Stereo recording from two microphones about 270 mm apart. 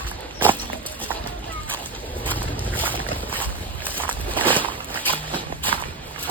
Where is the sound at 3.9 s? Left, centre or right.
Centre.